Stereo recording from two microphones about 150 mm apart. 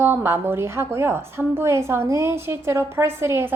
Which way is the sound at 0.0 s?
15° right (ahead or behind).